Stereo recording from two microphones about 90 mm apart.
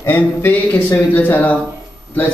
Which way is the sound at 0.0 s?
25° left (ahead or behind).